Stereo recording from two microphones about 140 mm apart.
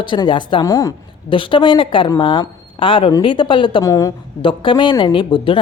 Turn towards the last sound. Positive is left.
turn(degrees=35)  # may be behind; listen again after turning